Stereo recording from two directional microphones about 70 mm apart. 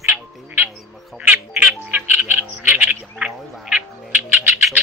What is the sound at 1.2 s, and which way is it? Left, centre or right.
Frog, right.